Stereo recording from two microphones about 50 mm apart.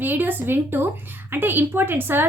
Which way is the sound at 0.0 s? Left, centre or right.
Right.